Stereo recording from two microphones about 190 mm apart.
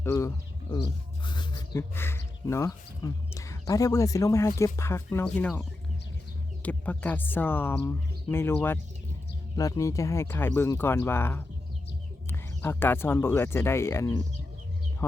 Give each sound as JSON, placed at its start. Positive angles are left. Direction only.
{"t": 0.0, "sound": "speech", "side_deg": 15}
{"t": 1.2, "sound": "a sound", "side_deg": 25}
{"t": 2.0, "sound": "speech", "side_deg": 10}